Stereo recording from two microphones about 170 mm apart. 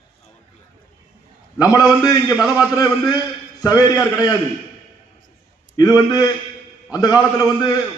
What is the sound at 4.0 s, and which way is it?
Speech, 10° right (ahead or behind).